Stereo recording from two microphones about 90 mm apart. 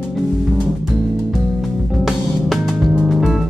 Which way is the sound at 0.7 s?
Centre (ahead or behind).